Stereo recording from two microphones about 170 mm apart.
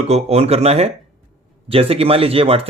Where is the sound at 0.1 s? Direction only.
40° right (ahead or behind).